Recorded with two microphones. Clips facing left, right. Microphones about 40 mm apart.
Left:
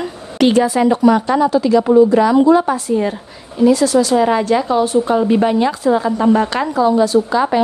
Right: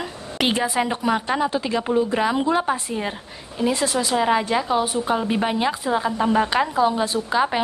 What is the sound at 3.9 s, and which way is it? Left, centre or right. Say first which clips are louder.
A woman's voice: left 7 dB; centre.